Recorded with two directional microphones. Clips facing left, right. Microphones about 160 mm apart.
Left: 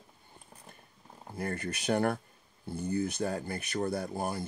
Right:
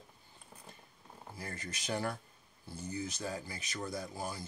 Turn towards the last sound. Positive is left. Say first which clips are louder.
# left 7 dB
turn(degrees=55)  # may be behind; listen again after turning